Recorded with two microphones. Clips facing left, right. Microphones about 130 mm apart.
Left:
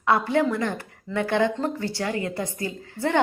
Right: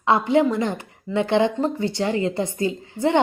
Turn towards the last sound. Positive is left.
turn(degrees=-20)  # may be behind; listen again after turning